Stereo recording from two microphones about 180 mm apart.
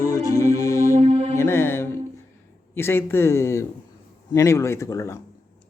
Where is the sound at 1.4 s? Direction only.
15° left (ahead or behind).